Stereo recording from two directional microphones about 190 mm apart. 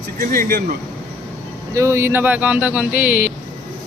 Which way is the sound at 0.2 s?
50° right (ahead or behind).